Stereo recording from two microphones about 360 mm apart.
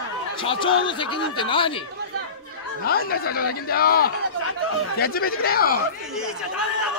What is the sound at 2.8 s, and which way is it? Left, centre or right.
Speech, left.